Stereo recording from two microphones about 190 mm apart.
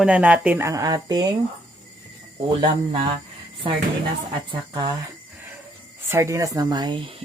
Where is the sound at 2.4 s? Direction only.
25° right (ahead or behind).